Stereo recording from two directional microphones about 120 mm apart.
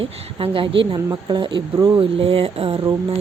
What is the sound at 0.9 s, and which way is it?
Speech, 35° right (ahead or behind).